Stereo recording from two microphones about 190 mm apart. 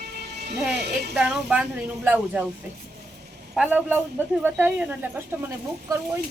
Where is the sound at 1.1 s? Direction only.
5° right (ahead or behind).